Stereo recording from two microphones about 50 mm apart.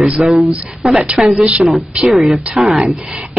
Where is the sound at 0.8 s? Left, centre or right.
Centre.